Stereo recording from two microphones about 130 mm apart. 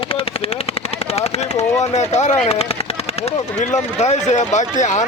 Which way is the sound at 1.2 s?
55° left (ahead or behind).